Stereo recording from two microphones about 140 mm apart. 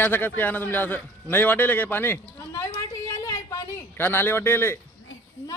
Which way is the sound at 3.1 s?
20° left (ahead or behind).